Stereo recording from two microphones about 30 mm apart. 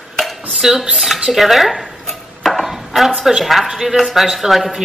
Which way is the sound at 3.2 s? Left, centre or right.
Centre.